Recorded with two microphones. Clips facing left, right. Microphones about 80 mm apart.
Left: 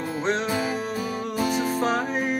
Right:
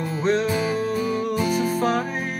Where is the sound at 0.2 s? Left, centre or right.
Left.